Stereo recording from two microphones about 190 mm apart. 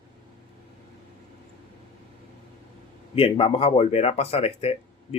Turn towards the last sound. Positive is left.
turn(degrees=30)  # may be behind; listen again after turning